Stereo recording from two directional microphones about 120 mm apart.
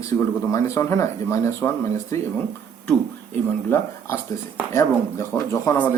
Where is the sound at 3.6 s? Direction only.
20° left (ahead or behind).